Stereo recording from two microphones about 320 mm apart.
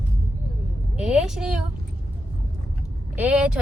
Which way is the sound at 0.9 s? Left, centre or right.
Centre.